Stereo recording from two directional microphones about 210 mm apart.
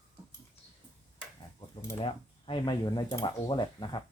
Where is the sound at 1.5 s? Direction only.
25° left (ahead or behind).